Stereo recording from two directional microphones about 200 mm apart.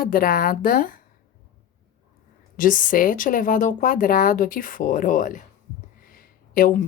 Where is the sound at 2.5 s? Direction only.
40° left (ahead or behind).